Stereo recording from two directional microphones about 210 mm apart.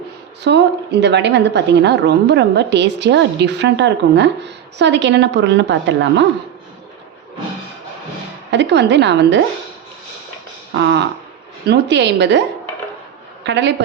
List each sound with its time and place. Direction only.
0.4 s a woman's voice: 55° right (ahead or behind)
8.4 s a woman's voice: 55° right (ahead or behind)
11.6 s a woman's voice: 55° right (ahead or behind)
13.4 s a woman's voice: 55° right (ahead or behind)